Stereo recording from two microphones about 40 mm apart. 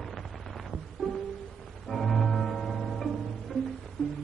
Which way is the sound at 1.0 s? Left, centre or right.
Centre.